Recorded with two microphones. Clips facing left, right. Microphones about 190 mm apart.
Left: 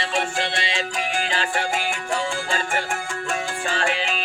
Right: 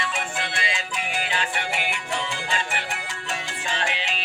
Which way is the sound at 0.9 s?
45° left (ahead or behind).